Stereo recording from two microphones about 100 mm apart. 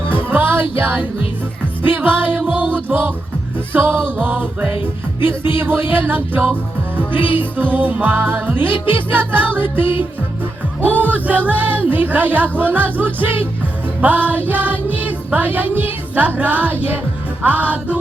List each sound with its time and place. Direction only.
0.3 s music: 20° right (ahead or behind)